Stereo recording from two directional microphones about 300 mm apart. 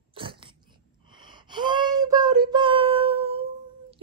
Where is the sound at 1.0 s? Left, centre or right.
Centre.